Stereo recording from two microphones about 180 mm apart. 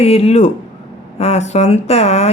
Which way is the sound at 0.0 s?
35° left (ahead or behind).